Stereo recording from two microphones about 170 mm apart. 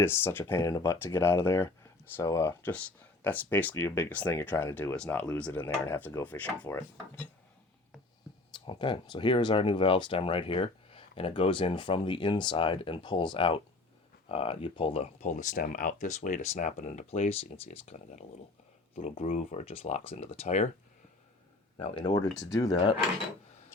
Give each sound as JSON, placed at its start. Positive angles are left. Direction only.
{"t": 0.0, "sound": "speech", "side_deg": 15}
{"t": 8.5, "sound": "speech", "side_deg": 30}
{"t": 22.0, "sound": "speech", "side_deg": 25}